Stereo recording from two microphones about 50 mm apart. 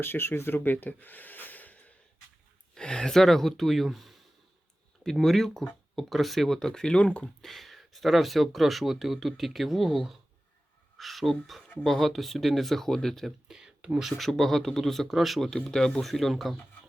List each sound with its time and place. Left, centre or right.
0.0 s speech: left
2.7 s speech: centre
5.2 s speech: centre
7.4 s speech: centre
13.5 s a sound: centre
14.0 s speech: centre
15.4 s speech: centre